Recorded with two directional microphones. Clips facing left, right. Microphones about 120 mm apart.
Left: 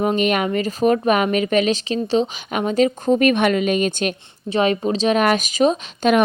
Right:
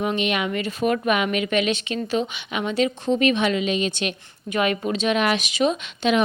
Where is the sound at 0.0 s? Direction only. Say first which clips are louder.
Left 5 dB; 40° left (ahead or behind).